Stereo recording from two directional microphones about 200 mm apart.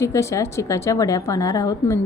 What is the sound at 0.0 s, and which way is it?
A woman's voice, 15° left (ahead or behind).